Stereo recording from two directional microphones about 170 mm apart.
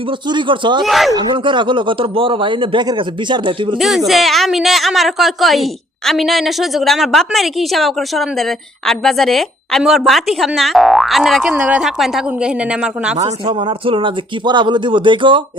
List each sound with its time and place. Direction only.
0.3 s speech: 30° right (ahead or behind)
0.9 s a woman's voice: centre (ahead or behind)
1.1 s speech: 30° right (ahead or behind)
3.8 s a woman's voice: centre (ahead or behind)
13.2 s speech: 30° right (ahead or behind)